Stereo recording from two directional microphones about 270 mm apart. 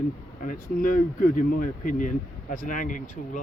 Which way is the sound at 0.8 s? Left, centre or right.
Left.